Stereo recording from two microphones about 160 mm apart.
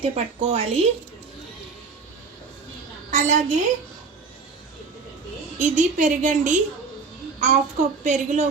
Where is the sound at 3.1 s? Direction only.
55° right (ahead or behind).